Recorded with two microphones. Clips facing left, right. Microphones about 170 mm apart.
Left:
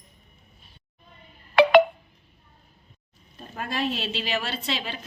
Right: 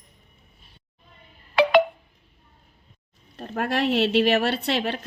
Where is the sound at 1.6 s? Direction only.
60° left (ahead or behind).